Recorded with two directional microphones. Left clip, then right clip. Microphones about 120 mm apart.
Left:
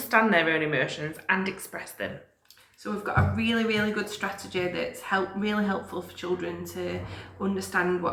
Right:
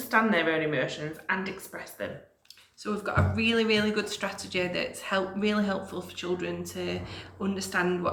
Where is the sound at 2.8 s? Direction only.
40° right (ahead or behind).